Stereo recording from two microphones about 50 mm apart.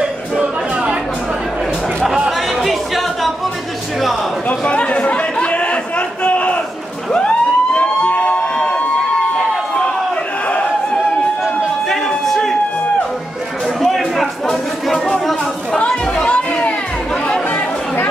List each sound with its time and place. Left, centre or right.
2.2 s chatter: centre
4.5 s chatter: left
7.1 s emergency vehicle: left
12.3 s a sound: centre
13.9 s a sound: centre
15.1 s chatter: centre
15.8 s chatter: centre